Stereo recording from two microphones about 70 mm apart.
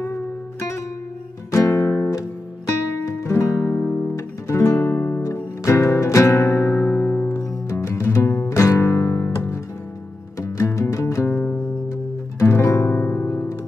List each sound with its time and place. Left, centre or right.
1.5 s music: left
3.1 s music: left
5.2 s music: left
7.7 s music: left
11.3 s music: left
12.4 s music: left
12.9 s music: left
13.3 s music: left